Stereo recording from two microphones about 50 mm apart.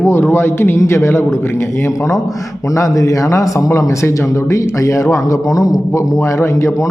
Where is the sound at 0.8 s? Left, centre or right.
Left.